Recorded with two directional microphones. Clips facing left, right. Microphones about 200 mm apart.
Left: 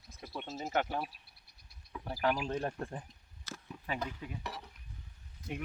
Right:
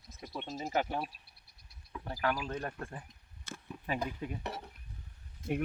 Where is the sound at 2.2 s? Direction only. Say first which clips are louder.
Left 2 dB; 20° left (ahead or behind).